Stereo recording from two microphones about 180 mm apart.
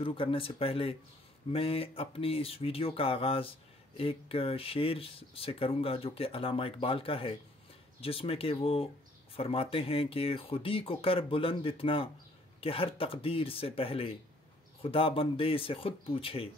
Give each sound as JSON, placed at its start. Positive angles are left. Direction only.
{"t": 0.0, "sound": "speech", "side_deg": 30}